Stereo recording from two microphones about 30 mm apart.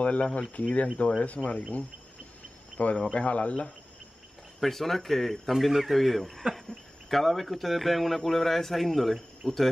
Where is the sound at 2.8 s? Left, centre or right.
Left.